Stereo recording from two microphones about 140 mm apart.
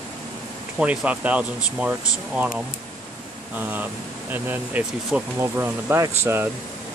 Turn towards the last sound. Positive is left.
turn(degrees=-20)  # may be behind; listen again after turning